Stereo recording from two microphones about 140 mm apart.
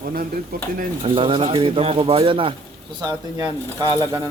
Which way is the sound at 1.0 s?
40° right (ahead or behind).